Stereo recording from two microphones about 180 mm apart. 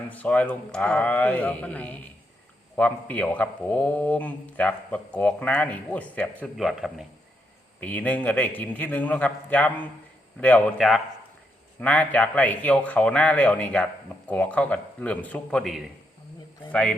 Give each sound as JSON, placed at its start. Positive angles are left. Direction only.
{"t": 0.1, "sound": "a man's voice", "side_deg": 10}